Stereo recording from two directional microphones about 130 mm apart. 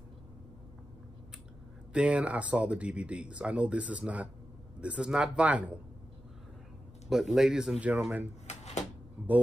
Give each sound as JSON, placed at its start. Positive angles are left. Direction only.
{"t": 2.0, "sound": "speech", "side_deg": -10}
{"t": 7.1, "sound": "speech", "side_deg": 0}
{"t": 8.5, "sound": "a sound", "side_deg": 60}